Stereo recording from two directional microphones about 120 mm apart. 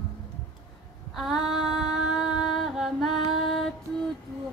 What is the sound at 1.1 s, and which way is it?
Female singing, 5° right (ahead or behind).